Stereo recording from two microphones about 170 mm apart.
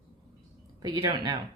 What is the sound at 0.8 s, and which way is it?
Speech, 25° right (ahead or behind).